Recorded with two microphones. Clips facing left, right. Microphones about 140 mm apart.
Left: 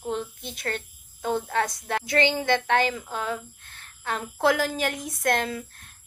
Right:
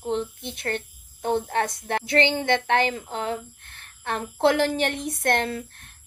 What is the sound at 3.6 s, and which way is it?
A woman's voice, 55° right (ahead or behind).